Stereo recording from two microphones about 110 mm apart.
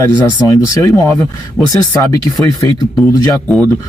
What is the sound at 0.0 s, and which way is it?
Speech, 30° left (ahead or behind).